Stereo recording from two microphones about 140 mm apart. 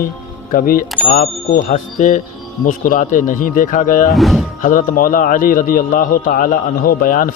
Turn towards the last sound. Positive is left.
turn(degrees=80)